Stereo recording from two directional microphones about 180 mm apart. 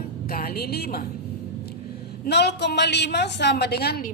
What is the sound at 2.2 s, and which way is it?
A woman's voice, 70° left (ahead or behind).